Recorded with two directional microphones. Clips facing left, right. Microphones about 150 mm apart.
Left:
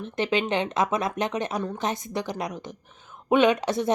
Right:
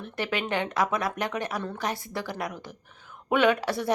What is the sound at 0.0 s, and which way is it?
Speech, 20° left (ahead or behind).